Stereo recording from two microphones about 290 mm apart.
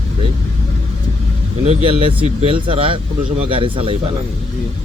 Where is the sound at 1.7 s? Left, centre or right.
Centre.